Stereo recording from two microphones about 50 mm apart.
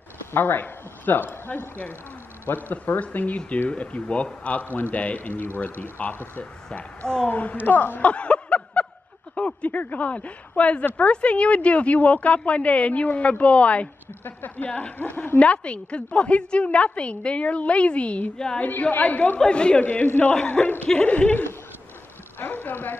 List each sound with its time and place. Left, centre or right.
0.3 s speech: left
2.4 s a woman's voice: left
14.2 s a woman's voice: left
14.7 s a woman's voice: left
15.0 s a woman's voice: left; by 20.6 s centre
20.6 s a woman's voice: left
21.0 s a woman's voice: left